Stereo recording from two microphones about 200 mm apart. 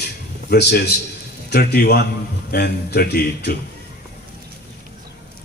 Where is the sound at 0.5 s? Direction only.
55° left (ahead or behind).